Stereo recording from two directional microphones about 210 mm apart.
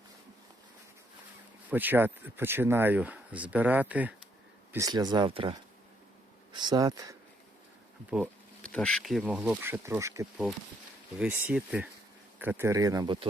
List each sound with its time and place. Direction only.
1.7 s speech: 10° right (ahead or behind)
8.6 s speech: 5° left (ahead or behind); by 13.2 s 20° right (ahead or behind)